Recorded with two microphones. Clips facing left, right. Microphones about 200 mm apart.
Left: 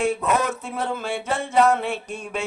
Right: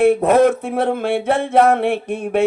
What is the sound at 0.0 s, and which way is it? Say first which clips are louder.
Speech: right 10 dB; 55° right (ahead or behind).